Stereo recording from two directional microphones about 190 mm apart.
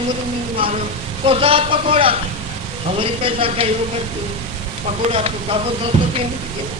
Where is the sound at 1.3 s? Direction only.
30° right (ahead or behind).